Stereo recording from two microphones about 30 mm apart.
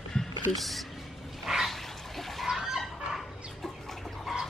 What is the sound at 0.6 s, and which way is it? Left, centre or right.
Speech, centre.